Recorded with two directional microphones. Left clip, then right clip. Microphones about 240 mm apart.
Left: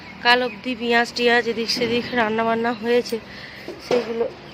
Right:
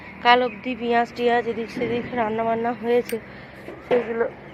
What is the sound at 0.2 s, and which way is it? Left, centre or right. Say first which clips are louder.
Speech: even; centre.